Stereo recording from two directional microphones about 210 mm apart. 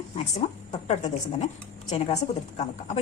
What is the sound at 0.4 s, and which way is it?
Speech, 30° left (ahead or behind).